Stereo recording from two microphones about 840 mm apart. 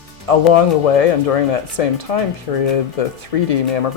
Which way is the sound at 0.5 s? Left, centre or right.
Left.